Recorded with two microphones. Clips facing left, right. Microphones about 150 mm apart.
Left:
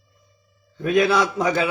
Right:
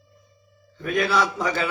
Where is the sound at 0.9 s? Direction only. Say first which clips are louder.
Left 4 dB; 15° left (ahead or behind).